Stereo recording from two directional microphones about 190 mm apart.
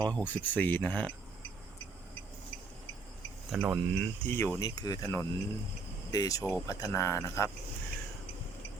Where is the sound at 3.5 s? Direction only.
Centre (ahead or behind).